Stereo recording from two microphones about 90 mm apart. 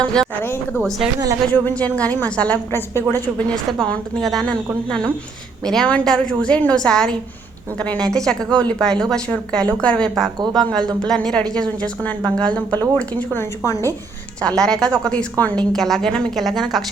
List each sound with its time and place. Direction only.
0.0 s a woman's voice: 10° left (ahead or behind)
0.4 s a woman's voice: 25° left (ahead or behind)
0.8 s a woman's voice: 5° left (ahead or behind)
1.5 s a woman's voice: 15° left (ahead or behind)
2.7 s a woman's voice: 25° left (ahead or behind)
3.7 s a woman's voice: 10° left (ahead or behind)
14.4 s a woman's voice: 5° left (ahead or behind)
15.7 s a woman's voice: 5° left (ahead or behind)